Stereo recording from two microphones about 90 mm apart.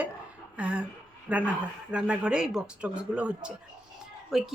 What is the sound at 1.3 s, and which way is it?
A woman's voice, 15° right (ahead or behind).